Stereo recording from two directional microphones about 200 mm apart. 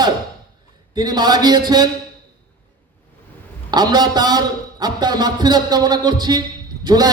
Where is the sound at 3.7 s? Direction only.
20° right (ahead or behind).